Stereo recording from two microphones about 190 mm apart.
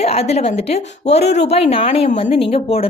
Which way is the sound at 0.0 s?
35° left (ahead or behind).